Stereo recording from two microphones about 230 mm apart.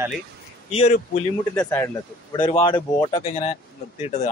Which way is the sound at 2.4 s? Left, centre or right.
Left.